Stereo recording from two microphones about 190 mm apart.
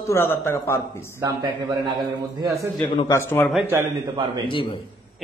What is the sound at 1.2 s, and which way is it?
Speech, 20° right (ahead or behind).